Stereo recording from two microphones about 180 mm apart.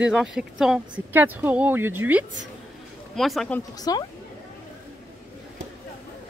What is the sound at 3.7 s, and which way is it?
Speech, 20° left (ahead or behind).